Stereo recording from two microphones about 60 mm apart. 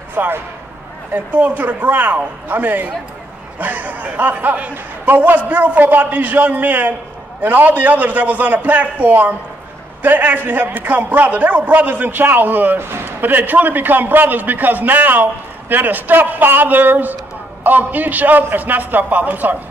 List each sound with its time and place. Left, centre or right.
0.1 s a man's voice: right